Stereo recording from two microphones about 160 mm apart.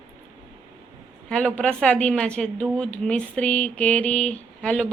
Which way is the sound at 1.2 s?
5° left (ahead or behind).